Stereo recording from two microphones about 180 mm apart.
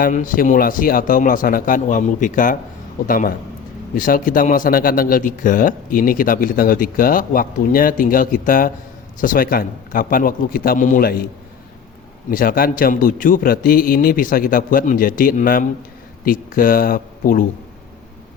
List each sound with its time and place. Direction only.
0.0 s a man's voice: 50° left (ahead or behind)
12.3 s a man's voice: 50° left (ahead or behind)